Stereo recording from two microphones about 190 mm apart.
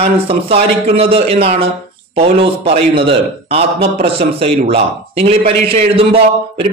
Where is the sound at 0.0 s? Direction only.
30° right (ahead or behind).